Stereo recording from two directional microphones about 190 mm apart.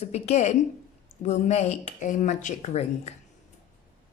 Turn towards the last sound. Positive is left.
turn(degrees=35)  # may be behind; listen again after turning